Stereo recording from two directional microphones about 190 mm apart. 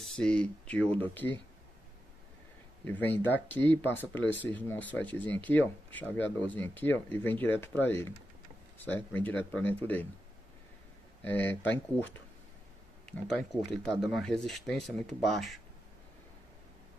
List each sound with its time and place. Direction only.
0.1 s speech: 5° left (ahead or behind)
2.8 s speech: 10° left (ahead or behind)
11.2 s speech: 10° left (ahead or behind)
13.4 s speech: centre (ahead or behind)